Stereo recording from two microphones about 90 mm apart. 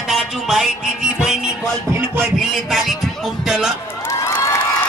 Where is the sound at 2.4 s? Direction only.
Centre (ahead or behind).